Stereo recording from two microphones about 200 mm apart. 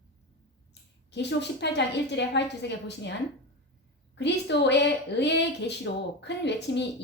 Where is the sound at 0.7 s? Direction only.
60° left (ahead or behind).